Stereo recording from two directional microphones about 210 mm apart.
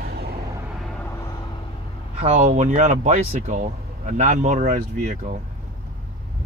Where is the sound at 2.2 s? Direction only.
35° right (ahead or behind).